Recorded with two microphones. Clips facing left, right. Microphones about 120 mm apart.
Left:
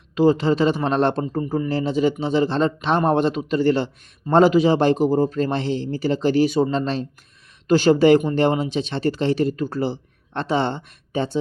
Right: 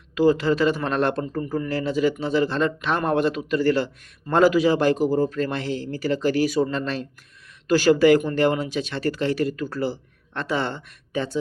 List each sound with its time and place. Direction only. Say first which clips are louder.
0.1 s a man's voice: left 2 dB; 25° left (ahead or behind)